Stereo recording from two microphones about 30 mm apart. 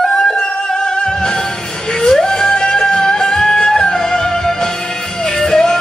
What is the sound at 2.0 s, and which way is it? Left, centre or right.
Music, centre.